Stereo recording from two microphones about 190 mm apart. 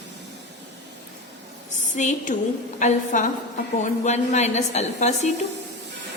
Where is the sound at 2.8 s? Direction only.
40° left (ahead or behind).